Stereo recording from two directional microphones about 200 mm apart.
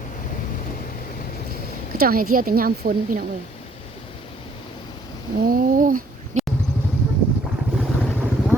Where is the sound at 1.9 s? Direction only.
45° right (ahead or behind).